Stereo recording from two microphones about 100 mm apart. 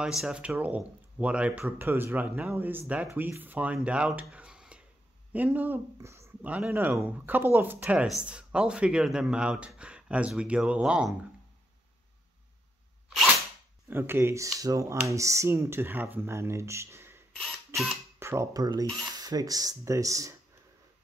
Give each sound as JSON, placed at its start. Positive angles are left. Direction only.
{"t": 0.0, "sound": "speech", "side_deg": -5}
{"t": 5.9, "sound": "a sound", "side_deg": -30}
{"t": 6.4, "sound": "speech", "side_deg": -15}
{"t": 13.8, "sound": "speech", "side_deg": -25}
{"t": 18.2, "sound": "speech", "side_deg": -30}